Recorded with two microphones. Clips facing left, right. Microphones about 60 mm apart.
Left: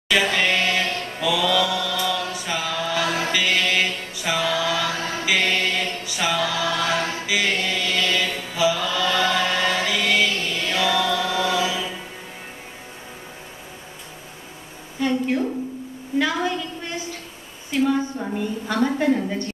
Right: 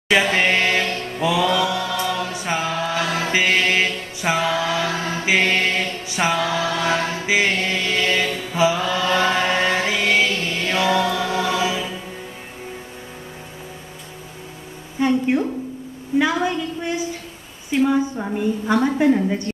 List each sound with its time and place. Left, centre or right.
0.3 s chant: right
5.2 s mantra: right
15.0 s a sound: right